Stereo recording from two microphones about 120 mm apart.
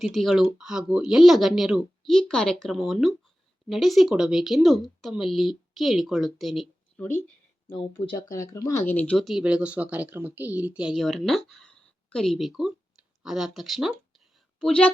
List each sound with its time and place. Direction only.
0.0 s speech: centre (ahead or behind)
8.3 s speech: 25° left (ahead or behind)
8.8 s speech: 15° left (ahead or behind)
9.1 s a woman's voice: centre (ahead or behind)
10.9 s speech: centre (ahead or behind)
14.6 s speech: 10° left (ahead or behind)